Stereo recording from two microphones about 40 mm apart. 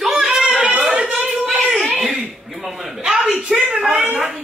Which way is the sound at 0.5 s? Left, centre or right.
Right.